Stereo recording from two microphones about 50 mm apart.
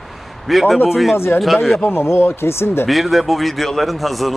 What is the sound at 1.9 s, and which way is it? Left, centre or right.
Speech, left.